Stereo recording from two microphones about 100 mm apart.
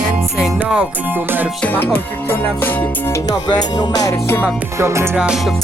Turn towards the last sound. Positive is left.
turn(degrees=-10)  # may be behind; listen again after turning